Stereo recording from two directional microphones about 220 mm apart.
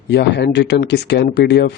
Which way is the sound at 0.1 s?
50° left (ahead or behind).